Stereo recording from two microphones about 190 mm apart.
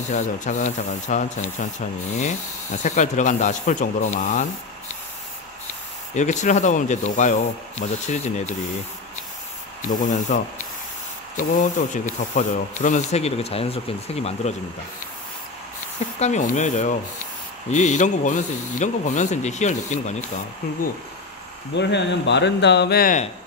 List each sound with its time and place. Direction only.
0.1 s speech: 40° left (ahead or behind)
6.1 s speech: 40° left (ahead or behind)
9.8 s speech: 45° left (ahead or behind)
16.2 s speech: 40° left (ahead or behind)
21.7 s speech: 65° left (ahead or behind); by 23.2 s 50° left (ahead or behind)